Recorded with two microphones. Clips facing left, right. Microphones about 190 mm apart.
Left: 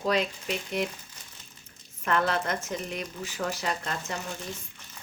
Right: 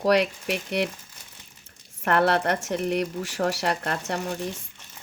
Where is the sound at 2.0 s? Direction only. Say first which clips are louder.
Right 5 dB; 70° right (ahead or behind).